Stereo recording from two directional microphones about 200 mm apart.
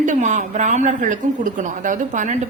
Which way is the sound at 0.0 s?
40° right (ahead or behind).